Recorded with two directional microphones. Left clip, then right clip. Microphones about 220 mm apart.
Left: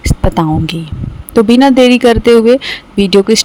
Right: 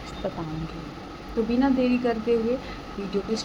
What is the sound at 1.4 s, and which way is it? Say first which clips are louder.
Speech: left 17 dB; 50° left (ahead or behind).